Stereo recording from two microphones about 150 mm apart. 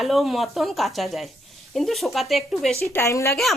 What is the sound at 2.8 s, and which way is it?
Speech, 20° left (ahead or behind).